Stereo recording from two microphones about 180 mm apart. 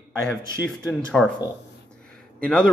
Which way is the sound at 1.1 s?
5° left (ahead or behind).